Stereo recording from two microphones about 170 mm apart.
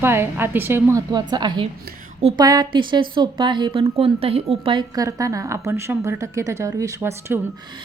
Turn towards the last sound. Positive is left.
turn(degrees=-15)  # may be behind; listen again after turning